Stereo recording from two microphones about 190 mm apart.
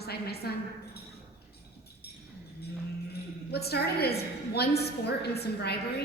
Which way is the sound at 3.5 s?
60° left (ahead or behind).